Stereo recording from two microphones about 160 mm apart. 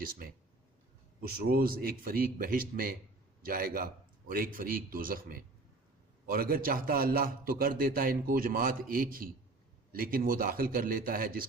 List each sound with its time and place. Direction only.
0.0 s a man's voice: 65° right (ahead or behind)